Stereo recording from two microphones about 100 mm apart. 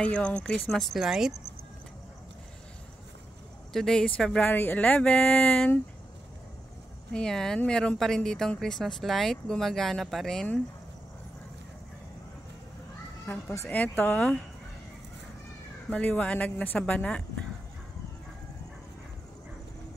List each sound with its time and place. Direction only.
0.0 s speech: 10° left (ahead or behind); by 1.3 s 5° right (ahead or behind)
3.7 s speech: 5° left (ahead or behind)
4.5 s speech: 20° left (ahead or behind)
7.1 s speech: 5° left (ahead or behind)
13.7 s speech: 15° left (ahead or behind)
15.9 s speech: 15° left (ahead or behind)